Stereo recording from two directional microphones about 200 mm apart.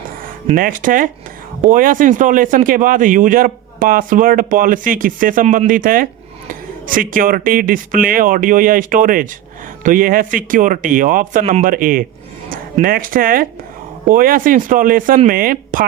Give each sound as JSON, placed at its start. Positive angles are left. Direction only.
{"t": 0.5, "sound": "speech", "side_deg": -45}